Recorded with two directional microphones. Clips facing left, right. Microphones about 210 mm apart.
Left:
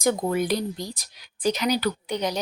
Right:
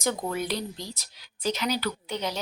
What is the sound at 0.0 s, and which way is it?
A woman's voice, 15° left (ahead or behind).